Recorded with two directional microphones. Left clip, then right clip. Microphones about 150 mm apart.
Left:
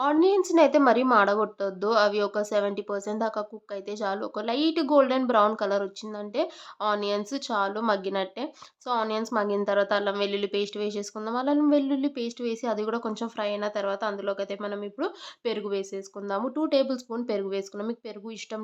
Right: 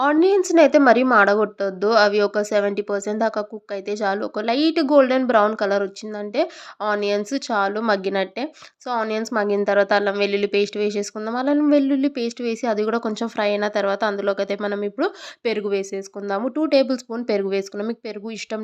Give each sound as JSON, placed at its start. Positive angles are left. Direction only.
{"t": 0.0, "sound": "speech", "side_deg": -20}